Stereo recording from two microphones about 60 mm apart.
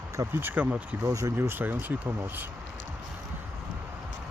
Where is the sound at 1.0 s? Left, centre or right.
Right.